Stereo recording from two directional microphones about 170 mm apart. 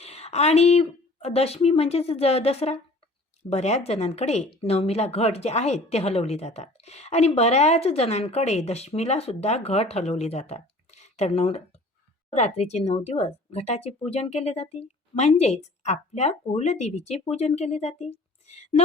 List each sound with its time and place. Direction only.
0.0 s speech: 35° left (ahead or behind)